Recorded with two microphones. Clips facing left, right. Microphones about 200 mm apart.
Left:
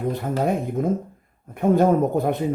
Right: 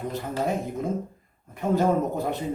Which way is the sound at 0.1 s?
55° left (ahead or behind).